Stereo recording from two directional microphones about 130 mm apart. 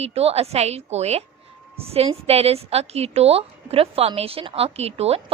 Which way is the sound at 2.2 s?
50° right (ahead or behind).